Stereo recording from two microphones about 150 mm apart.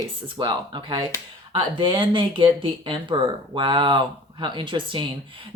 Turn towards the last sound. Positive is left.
turn(degrees=-35)  # may be behind; listen again after turning